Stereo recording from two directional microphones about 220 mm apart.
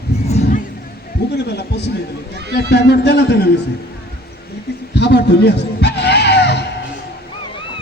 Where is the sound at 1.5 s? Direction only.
50° left (ahead or behind).